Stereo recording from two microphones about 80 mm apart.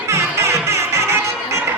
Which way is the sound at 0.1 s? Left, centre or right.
Right.